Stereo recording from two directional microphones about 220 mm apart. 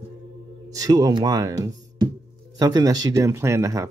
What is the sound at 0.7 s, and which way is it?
Speech, 15° right (ahead or behind).